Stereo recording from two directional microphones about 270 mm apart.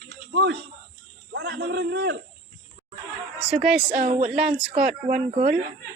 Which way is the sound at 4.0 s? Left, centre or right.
Right.